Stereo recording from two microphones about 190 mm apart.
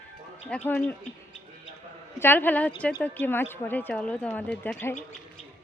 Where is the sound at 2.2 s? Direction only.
10° left (ahead or behind).